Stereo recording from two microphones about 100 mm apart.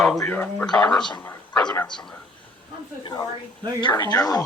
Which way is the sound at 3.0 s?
45° left (ahead or behind).